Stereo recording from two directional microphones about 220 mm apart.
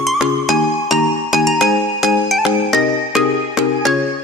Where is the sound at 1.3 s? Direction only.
Centre (ahead or behind).